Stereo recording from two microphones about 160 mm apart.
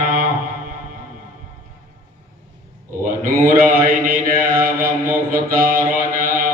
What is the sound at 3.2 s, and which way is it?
Mantra, 65° right (ahead or behind).